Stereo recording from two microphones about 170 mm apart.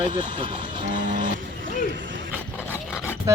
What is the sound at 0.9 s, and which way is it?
Vehicle, 50° right (ahead or behind).